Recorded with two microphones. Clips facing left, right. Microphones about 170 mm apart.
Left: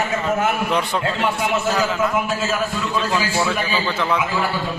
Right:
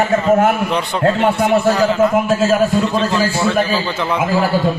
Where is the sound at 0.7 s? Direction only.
5° left (ahead or behind).